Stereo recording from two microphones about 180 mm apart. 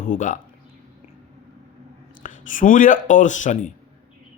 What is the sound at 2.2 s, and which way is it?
Speech, 45° left (ahead or behind).